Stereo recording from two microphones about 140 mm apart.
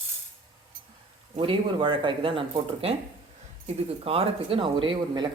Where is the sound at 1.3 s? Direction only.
40° right (ahead or behind).